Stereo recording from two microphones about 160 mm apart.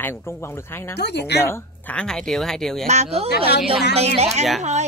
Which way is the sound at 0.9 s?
90° left.